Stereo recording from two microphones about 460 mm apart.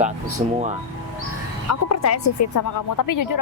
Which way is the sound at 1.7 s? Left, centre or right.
Left.